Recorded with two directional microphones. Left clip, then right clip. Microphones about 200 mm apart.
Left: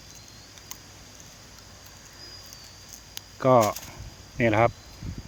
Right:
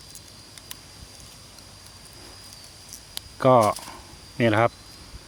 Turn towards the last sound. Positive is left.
turn(degrees=-10)  # may be behind; listen again after turning